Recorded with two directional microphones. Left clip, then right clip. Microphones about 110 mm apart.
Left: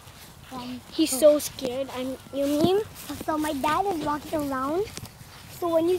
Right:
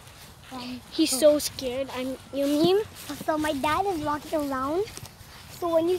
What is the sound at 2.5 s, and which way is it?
Speech, 20° right (ahead or behind).